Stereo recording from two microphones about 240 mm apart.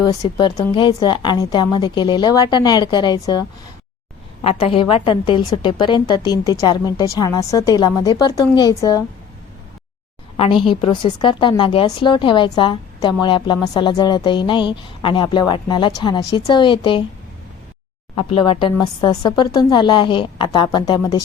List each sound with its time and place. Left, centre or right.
0.0 s a woman's voice: centre
4.4 s a woman's voice: left
10.3 s speech: left
18.1 s speech: left